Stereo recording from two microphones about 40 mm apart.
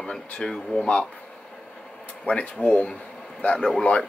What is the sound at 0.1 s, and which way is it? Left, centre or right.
Speech, centre.